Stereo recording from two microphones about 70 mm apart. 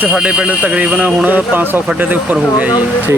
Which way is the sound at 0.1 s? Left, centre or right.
Centre.